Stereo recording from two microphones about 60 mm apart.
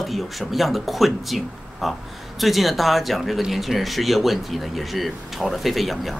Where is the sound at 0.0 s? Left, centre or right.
Centre.